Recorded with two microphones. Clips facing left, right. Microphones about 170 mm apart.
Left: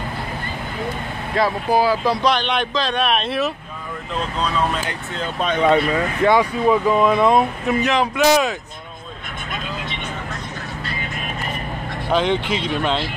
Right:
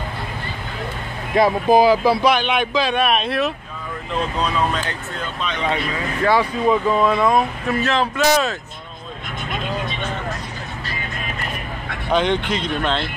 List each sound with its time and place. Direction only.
1.3 s speech: 15° right (ahead or behind); by 3.5 s centre (ahead or behind)
5.4 s speech: 50° left (ahead or behind)
6.2 s speech: 20° left (ahead or behind)
12.1 s speech: centre (ahead or behind)